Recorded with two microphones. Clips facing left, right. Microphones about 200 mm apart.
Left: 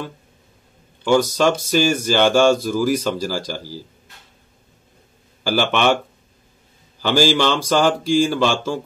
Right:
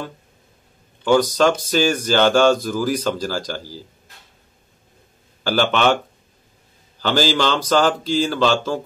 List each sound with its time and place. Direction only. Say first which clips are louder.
1.0 s speech: right 1 dB; 10° left (ahead or behind)
5.4 s speech: right 1 dB; 10° left (ahead or behind)
7.0 s speech: left 2 dB; 10° left (ahead or behind)